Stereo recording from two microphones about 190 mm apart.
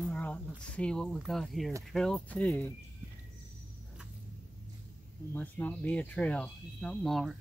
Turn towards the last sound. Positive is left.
turn(degrees=0)  # may be behind; listen again after turning